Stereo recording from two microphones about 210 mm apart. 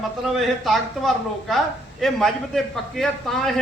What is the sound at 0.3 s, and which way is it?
A woman's voice, centre (ahead or behind).